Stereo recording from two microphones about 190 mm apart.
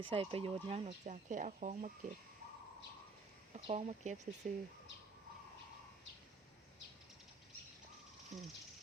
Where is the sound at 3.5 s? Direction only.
35° right (ahead or behind).